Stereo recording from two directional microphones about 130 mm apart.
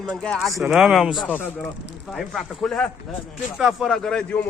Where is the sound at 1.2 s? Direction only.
10° left (ahead or behind).